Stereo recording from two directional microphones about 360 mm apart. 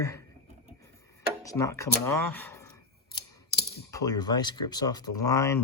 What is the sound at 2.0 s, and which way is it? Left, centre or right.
Speech, centre.